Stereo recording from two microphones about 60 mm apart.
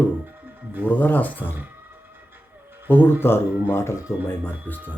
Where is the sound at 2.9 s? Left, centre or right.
Left.